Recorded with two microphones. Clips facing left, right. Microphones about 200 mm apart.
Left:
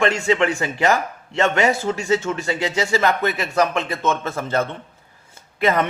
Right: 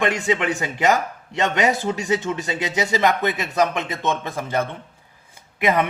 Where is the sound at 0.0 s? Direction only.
20° right (ahead or behind).